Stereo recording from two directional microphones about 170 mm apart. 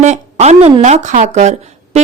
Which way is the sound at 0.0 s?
40° right (ahead or behind).